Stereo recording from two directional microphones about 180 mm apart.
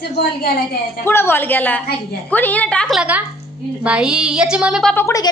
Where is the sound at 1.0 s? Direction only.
10° left (ahead or behind).